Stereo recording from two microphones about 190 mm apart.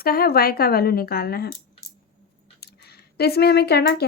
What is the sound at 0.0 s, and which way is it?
Speech, 50° left (ahead or behind).